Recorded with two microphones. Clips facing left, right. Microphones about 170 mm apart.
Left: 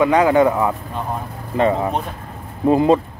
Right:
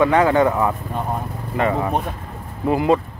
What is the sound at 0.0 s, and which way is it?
Speech, 15° left (ahead or behind).